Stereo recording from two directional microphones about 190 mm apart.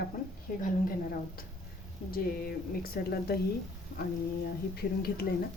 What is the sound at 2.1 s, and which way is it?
Speech, 50° left (ahead or behind).